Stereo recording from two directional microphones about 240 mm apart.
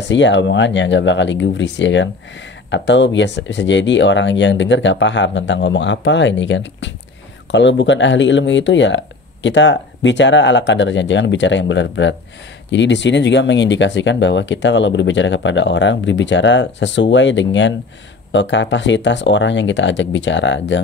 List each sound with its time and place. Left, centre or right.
0.1 s speech: left